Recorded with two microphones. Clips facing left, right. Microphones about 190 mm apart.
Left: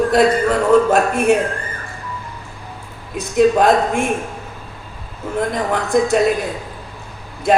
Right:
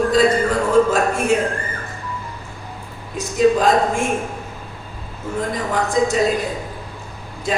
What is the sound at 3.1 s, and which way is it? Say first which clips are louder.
Speech: left 2 dB; 60° left (ahead or behind).